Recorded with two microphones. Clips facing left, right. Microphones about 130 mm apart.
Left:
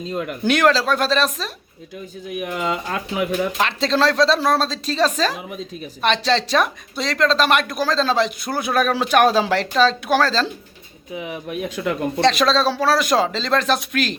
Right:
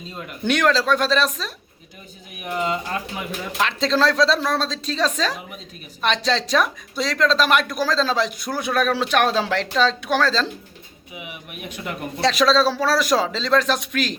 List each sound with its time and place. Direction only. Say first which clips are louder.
0.1 s speech: left 11 dB; 90° left
0.4 s speech: left 2 dB; 5° left (ahead or behind)
2.6 s speech: right 2 dB; 90° left
3.6 s speech: right 1 dB; centre (ahead or behind)
4.4 s speech: left 4 dB; 35° left (ahead or behind)
4.7 s speech: left 3 dB; 5° left (ahead or behind)
12.2 s speech: even; centre (ahead or behind)